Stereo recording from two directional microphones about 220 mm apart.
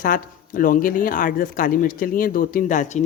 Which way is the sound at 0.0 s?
40° left (ahead or behind).